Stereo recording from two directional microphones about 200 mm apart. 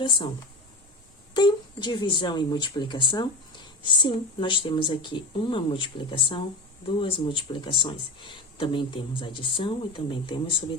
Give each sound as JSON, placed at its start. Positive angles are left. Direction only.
{"t": 1.3, "sound": "speech", "side_deg": 20}